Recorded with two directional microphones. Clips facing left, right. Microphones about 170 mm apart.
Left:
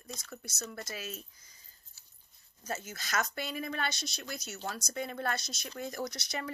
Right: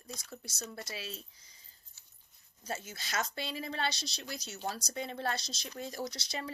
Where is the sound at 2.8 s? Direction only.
50° left (ahead or behind).